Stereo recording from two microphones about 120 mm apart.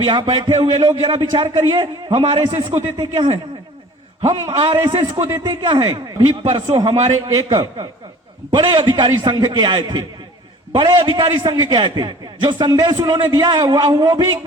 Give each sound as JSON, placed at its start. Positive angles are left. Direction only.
{"t": 0.0, "sound": "a man's voice", "side_deg": -45}